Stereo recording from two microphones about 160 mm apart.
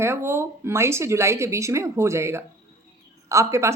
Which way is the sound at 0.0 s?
15° right (ahead or behind).